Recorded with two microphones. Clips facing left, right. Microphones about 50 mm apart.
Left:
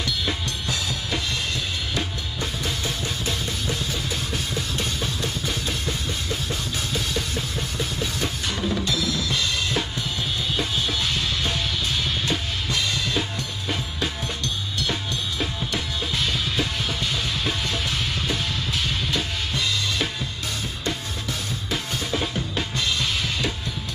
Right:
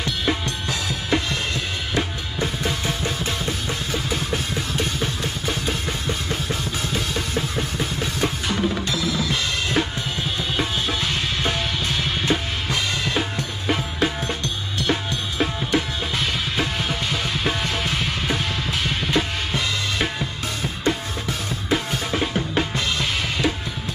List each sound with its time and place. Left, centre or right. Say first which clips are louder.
0.0 s drum kit: right 3 dB; right
3.3 s music: right 2 dB; right
13.7 s music: right 6 dB; right
21.6 s drum kit: right 6 dB; right